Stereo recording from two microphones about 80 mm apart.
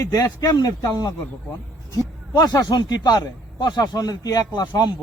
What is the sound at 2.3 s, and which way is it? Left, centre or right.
Speech, left.